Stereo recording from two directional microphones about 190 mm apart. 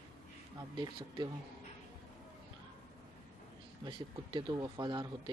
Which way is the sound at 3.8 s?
25° right (ahead or behind).